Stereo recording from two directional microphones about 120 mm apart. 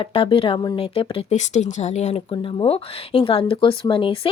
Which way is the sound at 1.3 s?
80° left.